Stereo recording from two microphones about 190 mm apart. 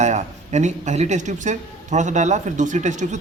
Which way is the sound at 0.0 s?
40° right (ahead or behind).